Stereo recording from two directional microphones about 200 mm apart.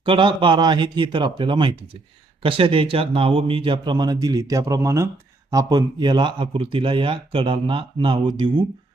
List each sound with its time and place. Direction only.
0.0 s speech: 25° right (ahead or behind)